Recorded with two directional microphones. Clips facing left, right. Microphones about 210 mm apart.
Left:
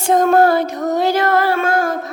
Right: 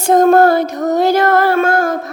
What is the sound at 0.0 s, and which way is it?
Child singing, 40° right (ahead or behind).